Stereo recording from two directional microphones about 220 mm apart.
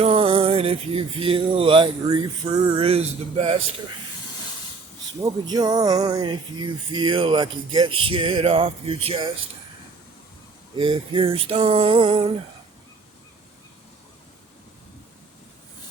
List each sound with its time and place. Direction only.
0.0 s music: 25° right (ahead or behind)
5.2 s music: 20° right (ahead or behind)
10.8 s music: 25° right (ahead or behind)